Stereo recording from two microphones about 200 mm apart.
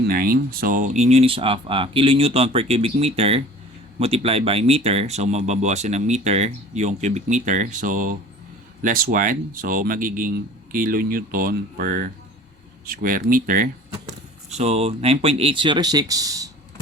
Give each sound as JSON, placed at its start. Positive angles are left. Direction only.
{"t": 0.1, "sound": "speech", "side_deg": -45}